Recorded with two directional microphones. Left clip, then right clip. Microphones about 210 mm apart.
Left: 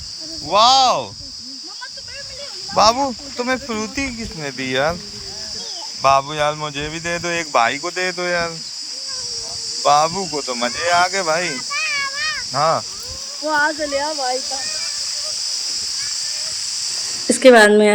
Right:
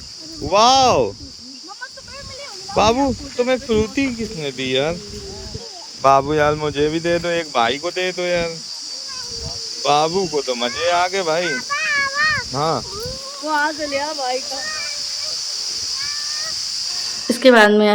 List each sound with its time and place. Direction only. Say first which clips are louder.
0.5 s speech: even; 15° right (ahead or behind)
2.7 s speech: left 1 dB; 10° right (ahead or behind)
6.0 s speech: right 2 dB; 15° right (ahead or behind)
9.8 s speech: left 1 dB; 10° right (ahead or behind)
12.5 s speech: left 3 dB; centre (ahead or behind)
13.4 s speech: left 2 dB; 30° left (ahead or behind)
17.2 s speech: left 2 dB; 5° left (ahead or behind)